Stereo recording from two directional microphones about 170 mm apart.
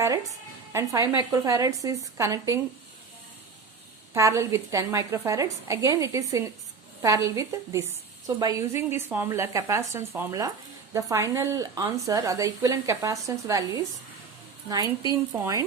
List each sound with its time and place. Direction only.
0.0 s a woman's voice: 20° right (ahead or behind)
4.1 s a woman's voice: 20° right (ahead or behind)
14.7 s a woman's voice: 25° right (ahead or behind)